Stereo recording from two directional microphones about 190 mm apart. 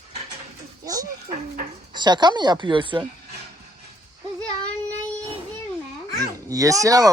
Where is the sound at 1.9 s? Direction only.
25° right (ahead or behind).